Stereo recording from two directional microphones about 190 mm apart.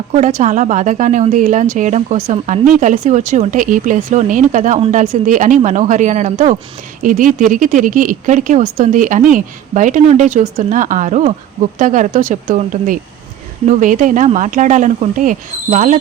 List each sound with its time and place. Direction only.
0.1 s a woman's voice: 40° right (ahead or behind)